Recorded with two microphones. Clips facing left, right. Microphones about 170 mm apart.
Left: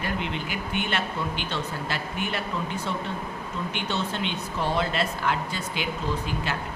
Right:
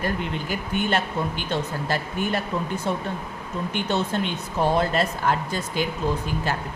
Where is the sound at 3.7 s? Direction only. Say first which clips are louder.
Right 6 dB; 45° right (ahead or behind).